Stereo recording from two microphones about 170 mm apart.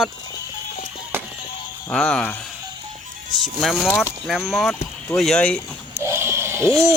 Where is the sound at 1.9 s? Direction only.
5° left (ahead or behind).